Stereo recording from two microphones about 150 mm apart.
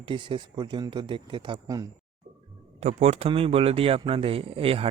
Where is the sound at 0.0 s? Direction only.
35° right (ahead or behind).